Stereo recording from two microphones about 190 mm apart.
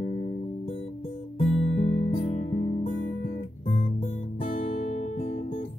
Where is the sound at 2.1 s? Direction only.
35° left (ahead or behind).